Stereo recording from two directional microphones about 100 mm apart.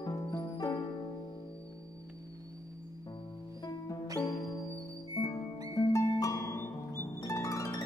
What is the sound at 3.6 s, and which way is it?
Music, 40° left (ahead or behind).